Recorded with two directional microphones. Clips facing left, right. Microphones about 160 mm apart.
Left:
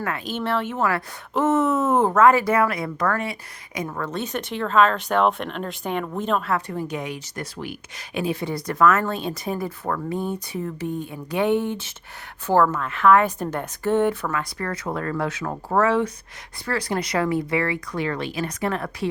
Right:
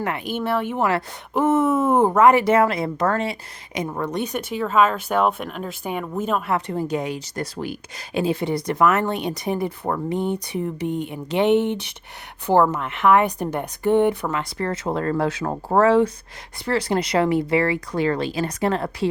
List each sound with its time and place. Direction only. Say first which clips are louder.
0.0 s speech: right 2 dB; 15° right (ahead or behind)
6.5 s a woman's voice: right 3 dB; 30° right (ahead or behind)
10.8 s speech: right 2 dB; 75° right (ahead or behind)
11.1 s a woman's voice: right 3 dB; 20° right (ahead or behind)